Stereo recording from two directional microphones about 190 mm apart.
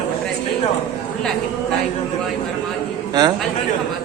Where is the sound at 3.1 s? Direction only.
20° right (ahead or behind).